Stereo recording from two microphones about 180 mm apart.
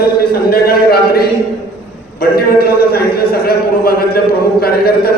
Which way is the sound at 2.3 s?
60° left (ahead or behind).